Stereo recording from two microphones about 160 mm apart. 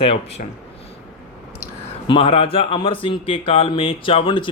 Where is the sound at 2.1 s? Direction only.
35° left (ahead or behind).